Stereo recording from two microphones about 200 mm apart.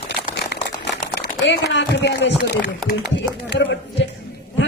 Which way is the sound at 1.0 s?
60° left (ahead or behind).